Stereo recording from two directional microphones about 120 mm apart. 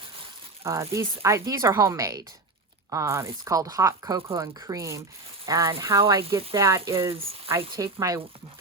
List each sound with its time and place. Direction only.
0.6 s speech: 25° right (ahead or behind)
7.1 s speech: 50° right (ahead or behind)
7.5 s speech: 25° right (ahead or behind)